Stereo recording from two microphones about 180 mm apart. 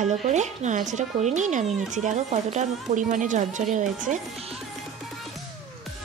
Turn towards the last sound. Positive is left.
turn(degrees=-45)  # may be behind; listen again after turning